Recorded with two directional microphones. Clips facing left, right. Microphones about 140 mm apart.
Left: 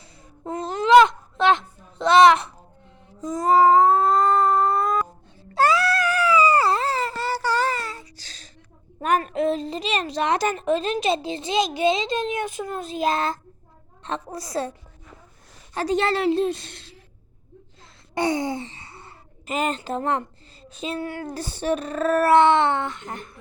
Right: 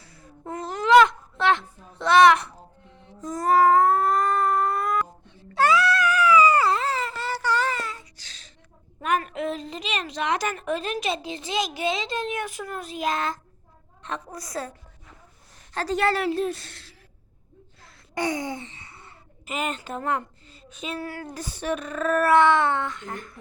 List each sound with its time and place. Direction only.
0.4 s a sound: 25° left (ahead or behind)
5.5 s cat: 35° left (ahead or behind)
9.0 s a woman's voice: 35° left (ahead or behind)
15.7 s a woman's voice: 15° left (ahead or behind)
18.1 s a woman's voice: 30° left (ahead or behind)